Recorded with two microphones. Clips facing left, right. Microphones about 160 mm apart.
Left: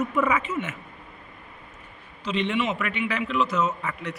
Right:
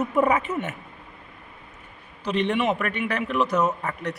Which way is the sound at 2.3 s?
55° right (ahead or behind).